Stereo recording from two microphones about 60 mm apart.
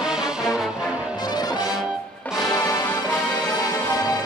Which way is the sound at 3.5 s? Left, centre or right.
Left.